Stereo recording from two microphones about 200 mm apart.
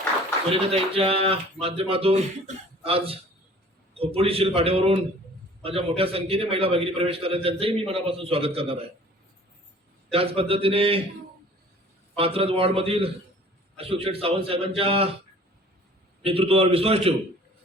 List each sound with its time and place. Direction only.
0.5 s a man's voice: 30° right (ahead or behind)
4.2 s a man's voice: 30° right (ahead or behind)
10.1 s a man's voice: 30° right (ahead or behind)
12.1 s a man's voice: 30° right (ahead or behind)
16.2 s a man's voice: 30° right (ahead or behind)